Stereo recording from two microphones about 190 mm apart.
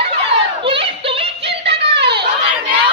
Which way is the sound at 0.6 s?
30° right (ahead or behind).